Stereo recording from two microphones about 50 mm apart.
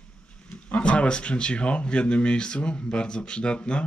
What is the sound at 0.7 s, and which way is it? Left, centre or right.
Speech, left.